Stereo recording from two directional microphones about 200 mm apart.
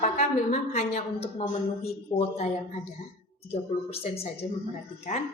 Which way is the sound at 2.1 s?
15° left (ahead or behind).